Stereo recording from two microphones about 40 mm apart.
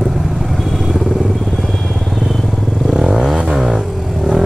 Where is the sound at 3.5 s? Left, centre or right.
Centre.